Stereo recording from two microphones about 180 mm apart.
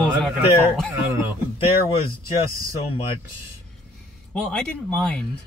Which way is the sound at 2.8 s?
30° left (ahead or behind).